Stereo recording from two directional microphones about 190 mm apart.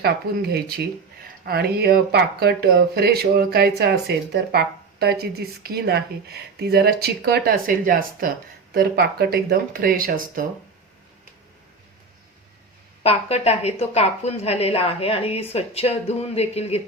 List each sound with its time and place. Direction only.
0.0 s speech: 60° right (ahead or behind)
13.0 s a woman's voice: 30° left (ahead or behind)